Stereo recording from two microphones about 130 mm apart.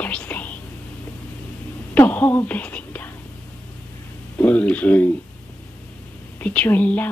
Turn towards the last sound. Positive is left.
turn(degrees=15)  # may be behind; listen again after turning